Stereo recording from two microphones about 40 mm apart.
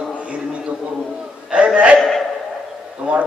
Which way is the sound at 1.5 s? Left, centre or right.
Right.